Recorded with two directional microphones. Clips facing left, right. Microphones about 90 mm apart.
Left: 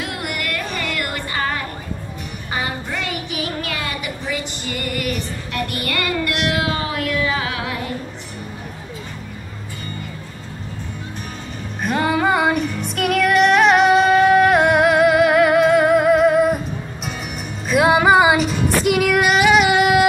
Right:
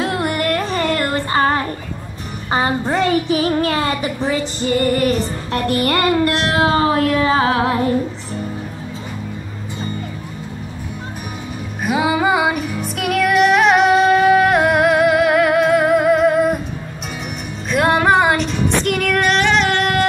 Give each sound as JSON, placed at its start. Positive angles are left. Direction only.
{"t": 0.0, "sound": "music", "side_deg": -30}
{"t": 2.5, "sound": "child singing", "side_deg": -35}
{"t": 11.8, "sound": "music", "side_deg": -5}
{"t": 17.6, "sound": "music", "side_deg": 5}